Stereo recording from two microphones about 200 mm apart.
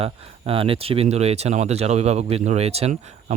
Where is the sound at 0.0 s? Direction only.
30° right (ahead or behind).